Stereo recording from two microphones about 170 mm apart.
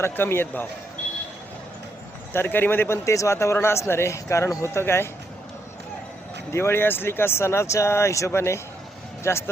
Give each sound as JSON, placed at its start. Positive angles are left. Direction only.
{"t": 0.0, "sound": "a man's voice", "side_deg": 15}
{"t": 2.3, "sound": "a man's voice", "side_deg": 10}
{"t": 6.5, "sound": "a man's voice", "side_deg": 15}